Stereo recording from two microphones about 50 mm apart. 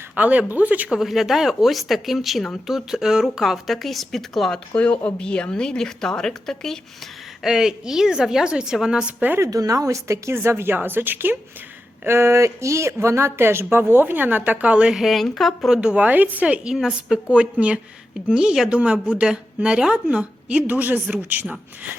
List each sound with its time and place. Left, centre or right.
0.2 s speech: right
0.9 s a woman's voice: centre
4.7 s a woman's voice: left
7.4 s a woman's voice: centre
9.4 s speech: right
10.3 s a woman's voice: right
10.8 s a woman's voice: right
12.0 s a woman's voice: right
14.9 s speech: centre
15.7 s a woman's voice: centre
16.0 s speech: right
16.7 s a woman's voice: centre
17.2 s a woman's voice: right